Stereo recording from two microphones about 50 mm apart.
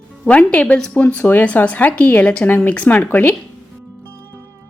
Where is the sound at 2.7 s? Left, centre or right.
Left.